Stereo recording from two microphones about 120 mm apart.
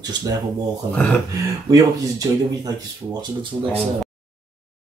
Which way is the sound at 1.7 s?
30° right (ahead or behind).